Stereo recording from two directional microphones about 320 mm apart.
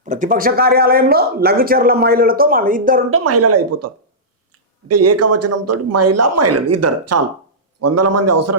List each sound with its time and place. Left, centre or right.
0.0 s speech: right
3.1 s a man's voice: right